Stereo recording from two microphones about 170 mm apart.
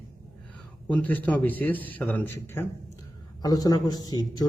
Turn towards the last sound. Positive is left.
turn(degrees=25)  # may be behind; listen again after turning